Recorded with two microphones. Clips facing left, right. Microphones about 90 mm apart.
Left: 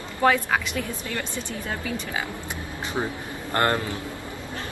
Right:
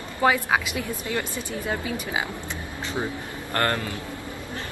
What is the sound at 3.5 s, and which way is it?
Speech, 20° left (ahead or behind).